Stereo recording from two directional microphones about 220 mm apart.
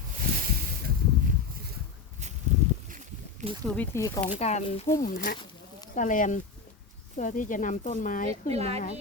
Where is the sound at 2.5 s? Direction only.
30° right (ahead or behind).